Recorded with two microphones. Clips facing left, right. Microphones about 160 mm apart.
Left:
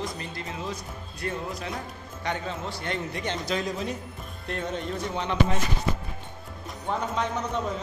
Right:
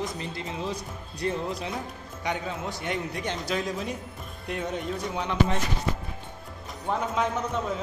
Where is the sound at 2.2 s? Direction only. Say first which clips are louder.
Even; 10° right (ahead or behind).